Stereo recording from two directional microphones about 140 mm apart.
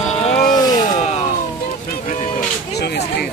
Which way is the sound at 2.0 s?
65° left (ahead or behind).